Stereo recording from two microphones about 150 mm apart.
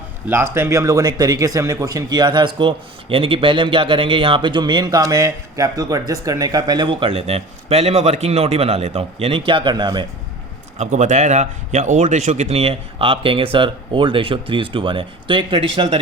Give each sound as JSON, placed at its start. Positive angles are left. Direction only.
{"t": 0.3, "sound": "speech", "side_deg": -15}
{"t": 10.8, "sound": "speech", "side_deg": -50}